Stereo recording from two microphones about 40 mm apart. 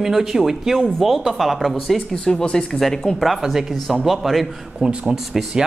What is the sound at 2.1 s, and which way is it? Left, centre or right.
A woman's voice, left.